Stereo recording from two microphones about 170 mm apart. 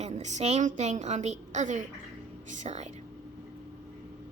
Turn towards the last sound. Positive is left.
turn(degrees=-40)  # may be behind; listen again after turning